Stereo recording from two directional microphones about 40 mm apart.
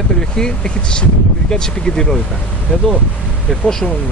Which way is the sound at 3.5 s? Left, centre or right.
Centre.